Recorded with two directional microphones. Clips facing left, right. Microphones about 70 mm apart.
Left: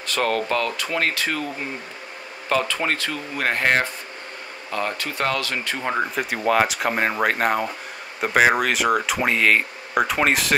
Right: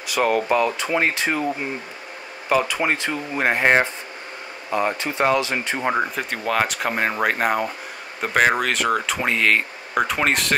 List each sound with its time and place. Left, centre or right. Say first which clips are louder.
0.0 s speech: right 2 dB; centre
2.5 s speech: right 2 dB; centre
5.9 s speech: even; centre